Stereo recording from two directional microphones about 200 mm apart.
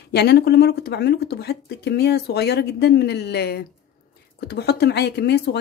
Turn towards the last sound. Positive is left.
turn(degrees=55)  # may be behind; listen again after turning